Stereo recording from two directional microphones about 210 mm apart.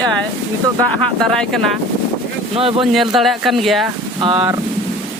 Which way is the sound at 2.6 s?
25° right (ahead or behind).